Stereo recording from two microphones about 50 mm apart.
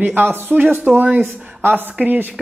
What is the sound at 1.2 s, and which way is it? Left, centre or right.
Speech, right.